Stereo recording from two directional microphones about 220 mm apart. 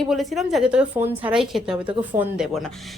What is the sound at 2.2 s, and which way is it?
Speech, 35° right (ahead or behind).